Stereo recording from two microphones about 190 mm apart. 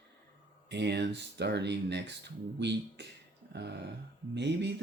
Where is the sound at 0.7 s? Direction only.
65° right (ahead or behind).